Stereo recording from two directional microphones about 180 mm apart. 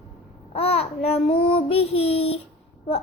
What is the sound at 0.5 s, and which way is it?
Child singing, 35° left (ahead or behind).